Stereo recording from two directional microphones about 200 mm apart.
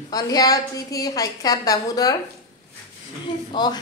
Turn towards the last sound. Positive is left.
turn(degrees=20)  # may be behind; listen again after turning